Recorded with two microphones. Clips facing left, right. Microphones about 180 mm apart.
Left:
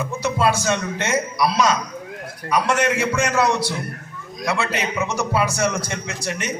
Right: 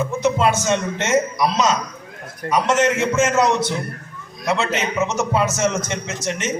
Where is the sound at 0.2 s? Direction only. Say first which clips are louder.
Right 1 dB; 20° right (ahead or behind).